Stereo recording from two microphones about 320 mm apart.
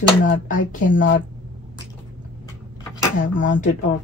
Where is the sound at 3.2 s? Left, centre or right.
Left.